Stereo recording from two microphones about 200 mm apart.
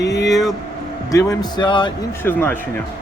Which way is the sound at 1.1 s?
20° left (ahead or behind).